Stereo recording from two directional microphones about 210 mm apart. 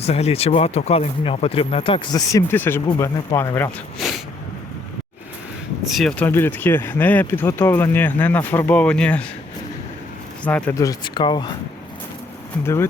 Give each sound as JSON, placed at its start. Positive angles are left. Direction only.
{"t": 0.0, "sound": "speech", "side_deg": 30}
{"t": 3.9, "sound": "a sound", "side_deg": 0}
{"t": 5.9, "sound": "speech", "side_deg": 0}
{"t": 10.4, "sound": "speech", "side_deg": 10}